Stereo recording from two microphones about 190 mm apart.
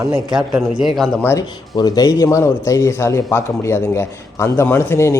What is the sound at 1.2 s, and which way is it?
A man's voice, 15° left (ahead or behind).